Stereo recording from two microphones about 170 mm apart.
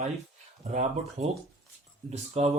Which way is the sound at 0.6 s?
45° right (ahead or behind).